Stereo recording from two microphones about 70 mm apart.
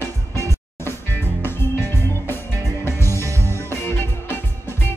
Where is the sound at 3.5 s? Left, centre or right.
Left.